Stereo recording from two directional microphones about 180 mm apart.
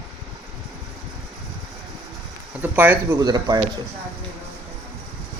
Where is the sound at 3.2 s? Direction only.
20° right (ahead or behind).